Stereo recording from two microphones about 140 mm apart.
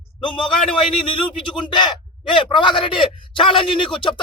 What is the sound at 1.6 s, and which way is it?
Speech, 35° left (ahead or behind).